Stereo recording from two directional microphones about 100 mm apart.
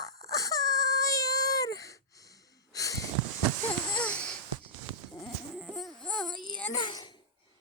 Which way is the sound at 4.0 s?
10° left (ahead or behind).